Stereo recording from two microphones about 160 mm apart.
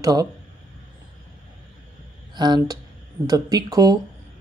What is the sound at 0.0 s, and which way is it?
Speech, 25° right (ahead or behind).